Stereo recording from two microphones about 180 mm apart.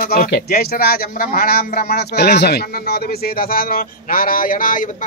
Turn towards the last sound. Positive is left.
turn(degrees=50)  # may be behind; listen again after turning